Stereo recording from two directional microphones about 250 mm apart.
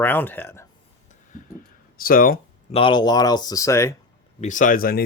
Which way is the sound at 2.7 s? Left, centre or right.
Centre.